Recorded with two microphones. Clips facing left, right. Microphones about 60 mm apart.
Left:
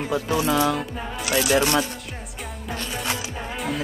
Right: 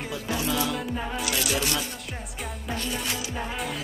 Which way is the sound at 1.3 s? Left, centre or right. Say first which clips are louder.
Left 10 dB; left.